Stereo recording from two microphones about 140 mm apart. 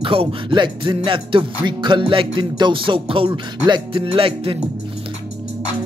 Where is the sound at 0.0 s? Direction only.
40° right (ahead or behind).